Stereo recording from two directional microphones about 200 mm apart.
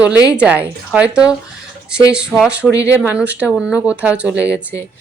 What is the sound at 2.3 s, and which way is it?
Speech, 5° right (ahead or behind).